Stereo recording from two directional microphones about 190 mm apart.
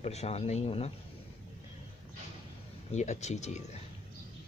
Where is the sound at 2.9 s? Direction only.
35° left (ahead or behind).